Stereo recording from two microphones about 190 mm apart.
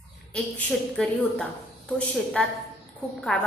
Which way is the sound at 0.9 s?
Centre (ahead or behind).